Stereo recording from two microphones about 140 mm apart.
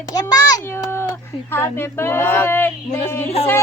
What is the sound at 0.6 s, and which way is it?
Speech, 15° left (ahead or behind).